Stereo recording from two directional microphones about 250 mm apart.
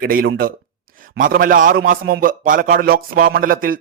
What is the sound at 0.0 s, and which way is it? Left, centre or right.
A man's voice, right.